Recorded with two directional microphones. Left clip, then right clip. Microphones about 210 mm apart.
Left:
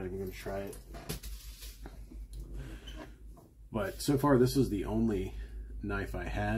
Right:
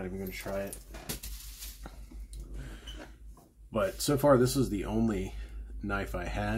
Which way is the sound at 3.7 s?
15° right (ahead or behind).